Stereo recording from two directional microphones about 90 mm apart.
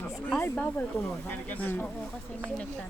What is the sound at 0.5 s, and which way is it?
Speech, 20° left (ahead or behind).